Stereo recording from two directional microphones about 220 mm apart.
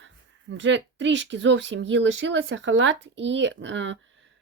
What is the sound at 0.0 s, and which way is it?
A woman's voice, 55° right (ahead or behind).